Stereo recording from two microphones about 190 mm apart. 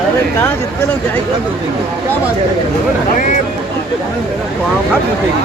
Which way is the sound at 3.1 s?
40° left (ahead or behind).